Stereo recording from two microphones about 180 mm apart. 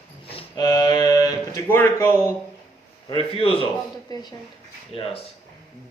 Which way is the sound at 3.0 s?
30° left (ahead or behind).